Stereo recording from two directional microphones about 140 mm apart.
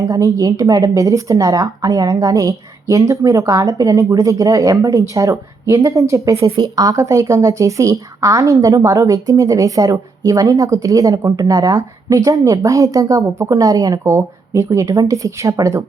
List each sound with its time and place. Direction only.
0.0 s a woman's voice: 25° right (ahead or behind)